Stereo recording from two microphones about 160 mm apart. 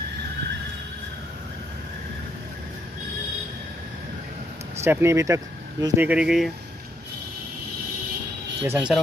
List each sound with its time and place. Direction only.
4.8 s speech: 15° right (ahead or behind)
6.0 s speech: 5° right (ahead or behind)
8.6 s speech: 5° right (ahead or behind)